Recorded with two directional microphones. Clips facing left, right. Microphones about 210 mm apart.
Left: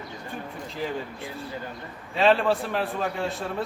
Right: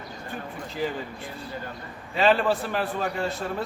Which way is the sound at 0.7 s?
Centre (ahead or behind).